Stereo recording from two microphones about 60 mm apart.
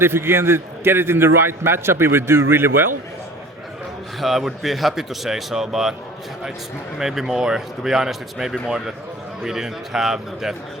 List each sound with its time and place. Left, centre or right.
0.0 s a man's voice: right
4.2 s speech: centre
7.0 s speech: centre